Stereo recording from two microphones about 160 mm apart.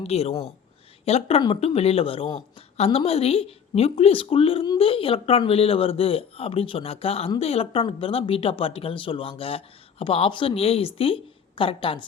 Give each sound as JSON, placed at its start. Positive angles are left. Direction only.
{"t": 0.0, "sound": "speech", "side_deg": 40}